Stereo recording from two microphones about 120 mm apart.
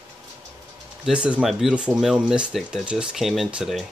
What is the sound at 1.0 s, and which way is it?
Speech, 10° right (ahead or behind).